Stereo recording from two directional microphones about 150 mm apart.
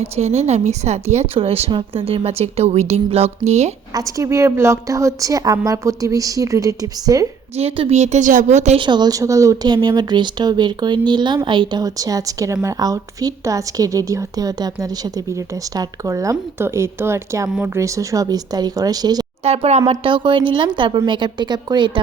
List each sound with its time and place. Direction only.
0.0 s speech: 45° right (ahead or behind)
3.9 s a woman's voice: 20° right (ahead or behind)
7.5 s speech: 45° right (ahead or behind)
8.8 s a woman's voice: 30° right (ahead or behind)
19.5 s speech: 45° right (ahead or behind)
19.9 s a woman's voice: 35° right (ahead or behind)